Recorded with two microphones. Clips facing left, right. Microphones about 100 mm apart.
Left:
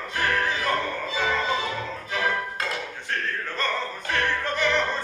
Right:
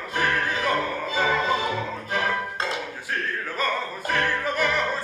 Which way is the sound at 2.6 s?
25° right (ahead or behind).